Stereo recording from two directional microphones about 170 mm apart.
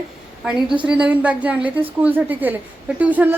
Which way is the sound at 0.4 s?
5° right (ahead or behind).